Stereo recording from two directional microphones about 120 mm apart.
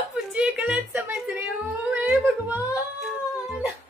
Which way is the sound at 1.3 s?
Centre (ahead or behind).